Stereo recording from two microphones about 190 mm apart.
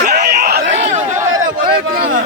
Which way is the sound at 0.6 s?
40° right (ahead or behind).